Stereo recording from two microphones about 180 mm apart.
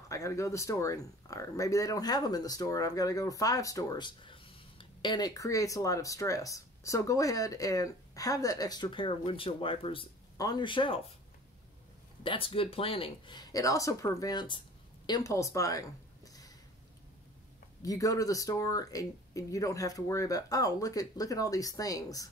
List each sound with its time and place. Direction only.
0.1 s speech: 15° left (ahead or behind)
12.2 s speech: 30° left (ahead or behind)
17.8 s speech: 20° left (ahead or behind)